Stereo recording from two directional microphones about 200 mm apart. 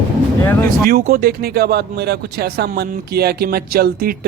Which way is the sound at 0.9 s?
50° right (ahead or behind).